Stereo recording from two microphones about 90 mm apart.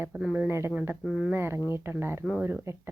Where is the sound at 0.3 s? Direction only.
25° right (ahead or behind).